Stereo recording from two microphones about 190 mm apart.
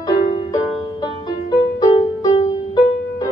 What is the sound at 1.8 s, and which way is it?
Music, 20° left (ahead or behind).